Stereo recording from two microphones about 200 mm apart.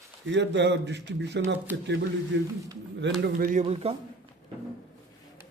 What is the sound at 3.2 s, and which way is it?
Speech, 45° right (ahead or behind).